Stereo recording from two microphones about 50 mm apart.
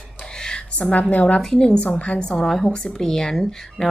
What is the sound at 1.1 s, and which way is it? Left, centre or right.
Speech, left.